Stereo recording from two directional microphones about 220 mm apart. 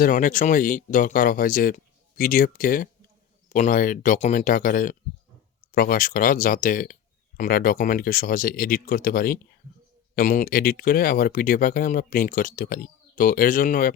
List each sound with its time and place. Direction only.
0.0 s speech: 35° left (ahead or behind)